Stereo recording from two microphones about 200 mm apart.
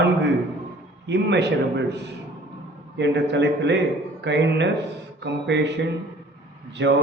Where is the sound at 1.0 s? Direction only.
60° right (ahead or behind).